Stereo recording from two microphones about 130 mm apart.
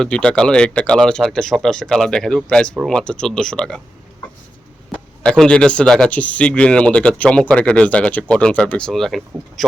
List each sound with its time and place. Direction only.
0.0 s speech: 5° left (ahead or behind)
5.2 s speech: 5° left (ahead or behind)